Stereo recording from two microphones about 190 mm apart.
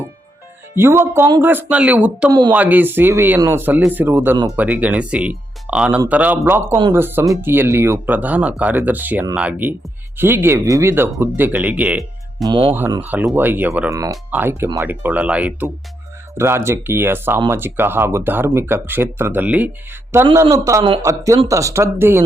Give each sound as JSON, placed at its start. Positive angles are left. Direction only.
{"t": 0.8, "sound": "speech", "side_deg": -10}
{"t": 12.4, "sound": "speech", "side_deg": -25}
{"t": 13.0, "sound": "speech", "side_deg": -10}